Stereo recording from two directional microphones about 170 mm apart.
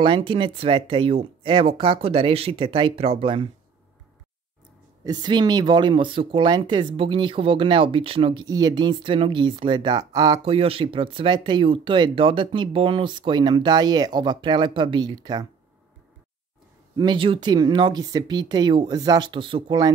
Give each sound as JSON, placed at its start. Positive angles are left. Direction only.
{"t": 0.0, "sound": "speech", "side_deg": -30}
{"t": 5.0, "sound": "speech", "side_deg": -25}
{"t": 16.9, "sound": "speech", "side_deg": -25}